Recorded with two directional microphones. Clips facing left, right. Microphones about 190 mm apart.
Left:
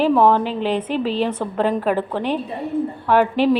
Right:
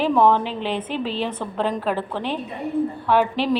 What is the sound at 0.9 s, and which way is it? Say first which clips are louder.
Speech: left 5 dB; 45° left (ahead or behind).